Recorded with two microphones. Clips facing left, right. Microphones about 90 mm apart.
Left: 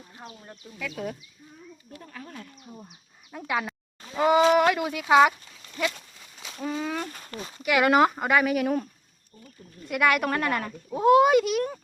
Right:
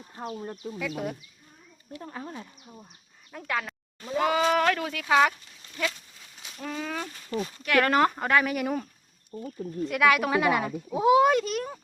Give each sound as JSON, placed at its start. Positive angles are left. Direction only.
{"t": 0.3, "sound": "speech", "side_deg": -35}
{"t": 0.8, "sound": "speech", "side_deg": -15}
{"t": 2.0, "sound": "speech", "side_deg": -30}
{"t": 3.3, "sound": "speech", "side_deg": 10}
{"t": 4.2, "sound": "speech", "side_deg": 20}
{"t": 4.4, "sound": "speech", "side_deg": 10}
{"t": 6.6, "sound": "speech", "side_deg": 10}
{"t": 9.3, "sound": "speech", "side_deg": -90}
{"t": 9.9, "sound": "speech", "side_deg": 0}